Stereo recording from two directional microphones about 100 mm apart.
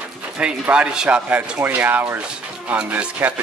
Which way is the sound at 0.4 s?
10° right (ahead or behind).